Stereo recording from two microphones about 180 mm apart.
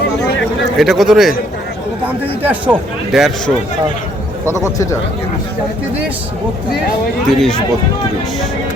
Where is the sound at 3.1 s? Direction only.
Centre (ahead or behind).